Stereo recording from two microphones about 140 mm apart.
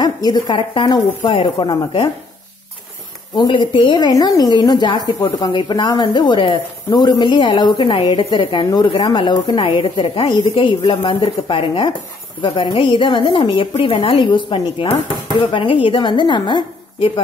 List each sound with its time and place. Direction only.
0.0 s a woman's voice: 30° left (ahead or behind)
3.3 s a woman's voice: 35° left (ahead or behind)